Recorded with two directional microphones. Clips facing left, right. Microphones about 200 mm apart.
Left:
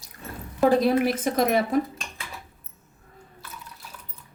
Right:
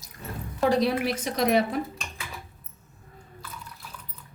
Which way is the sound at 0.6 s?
50° left (ahead or behind).